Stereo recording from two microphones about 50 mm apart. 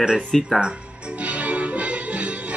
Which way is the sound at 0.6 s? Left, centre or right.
Right.